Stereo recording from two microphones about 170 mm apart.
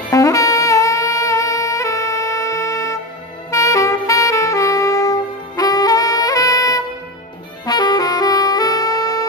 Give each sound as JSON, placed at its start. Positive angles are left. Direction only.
{"t": 0.1, "sound": "saxophone", "side_deg": 20}